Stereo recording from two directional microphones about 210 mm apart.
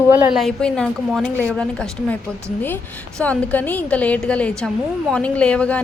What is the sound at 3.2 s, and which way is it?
A woman's voice, 5° left (ahead or behind).